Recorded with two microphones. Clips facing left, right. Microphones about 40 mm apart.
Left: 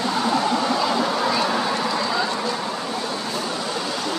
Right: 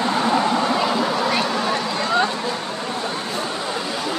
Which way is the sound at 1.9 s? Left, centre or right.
Right.